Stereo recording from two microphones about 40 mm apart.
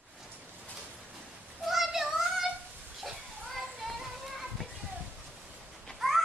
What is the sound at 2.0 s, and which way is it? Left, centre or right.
Child singing, centre.